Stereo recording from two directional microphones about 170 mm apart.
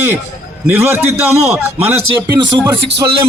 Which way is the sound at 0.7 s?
15° right (ahead or behind).